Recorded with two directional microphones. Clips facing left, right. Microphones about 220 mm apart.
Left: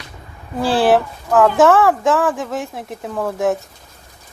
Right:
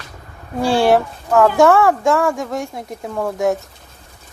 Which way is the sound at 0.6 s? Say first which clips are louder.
Even; centre (ahead or behind).